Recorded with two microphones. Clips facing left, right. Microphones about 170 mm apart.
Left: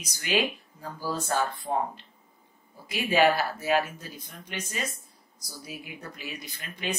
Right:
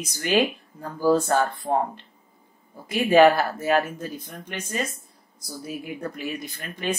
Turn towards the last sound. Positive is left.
turn(degrees=-50)  # may be behind; listen again after turning